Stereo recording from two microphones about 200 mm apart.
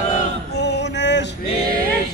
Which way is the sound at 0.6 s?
60° left (ahead or behind).